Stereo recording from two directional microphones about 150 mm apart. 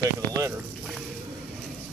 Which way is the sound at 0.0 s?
25° right (ahead or behind).